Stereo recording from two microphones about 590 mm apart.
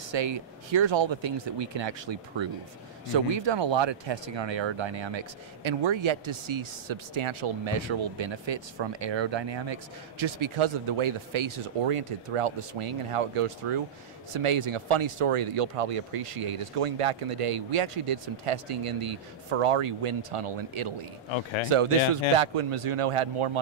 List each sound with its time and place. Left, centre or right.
0.1 s speech: right